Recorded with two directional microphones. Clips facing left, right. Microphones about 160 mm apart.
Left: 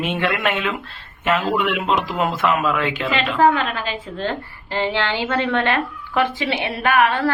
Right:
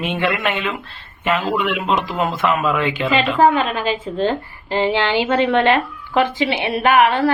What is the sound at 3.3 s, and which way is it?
A woman's voice, 20° right (ahead or behind).